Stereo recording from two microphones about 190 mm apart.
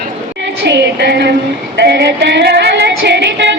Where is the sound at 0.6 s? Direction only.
65° right (ahead or behind).